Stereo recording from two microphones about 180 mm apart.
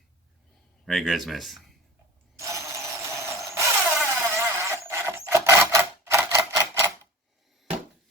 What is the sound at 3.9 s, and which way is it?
Wood, 10° right (ahead or behind).